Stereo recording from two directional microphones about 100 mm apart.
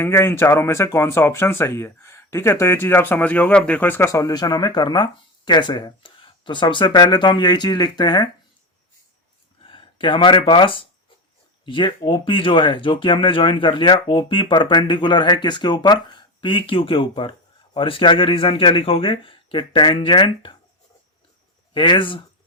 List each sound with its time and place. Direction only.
0.0 s speech: 25° left (ahead or behind)
4.1 s speech: 40° left (ahead or behind)
9.6 s speech: 55° left (ahead or behind)
21.7 s speech: 55° left (ahead or behind)